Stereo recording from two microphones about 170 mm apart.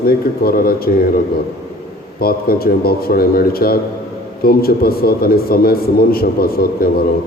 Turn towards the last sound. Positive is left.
turn(degrees=60)  # may be behind; listen again after turning